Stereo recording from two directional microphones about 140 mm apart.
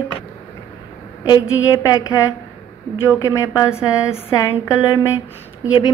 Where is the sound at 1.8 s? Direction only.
25° left (ahead or behind).